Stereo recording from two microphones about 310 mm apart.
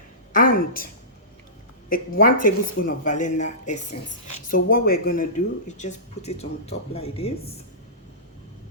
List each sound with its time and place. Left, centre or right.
0.3 s a woman's voice: left
1.9 s speech: left